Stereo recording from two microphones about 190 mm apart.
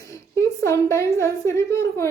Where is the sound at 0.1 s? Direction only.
15° left (ahead or behind).